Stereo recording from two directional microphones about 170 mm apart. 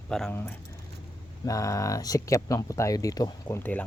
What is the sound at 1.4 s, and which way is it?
Speech, 20° left (ahead or behind).